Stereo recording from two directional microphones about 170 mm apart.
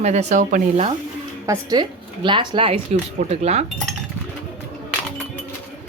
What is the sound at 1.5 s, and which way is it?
A woman's voice, 25° right (ahead or behind).